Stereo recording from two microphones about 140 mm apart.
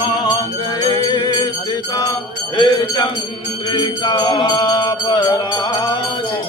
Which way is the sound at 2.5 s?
30° left (ahead or behind).